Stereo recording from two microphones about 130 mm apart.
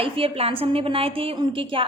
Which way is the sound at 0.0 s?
45° right (ahead or behind).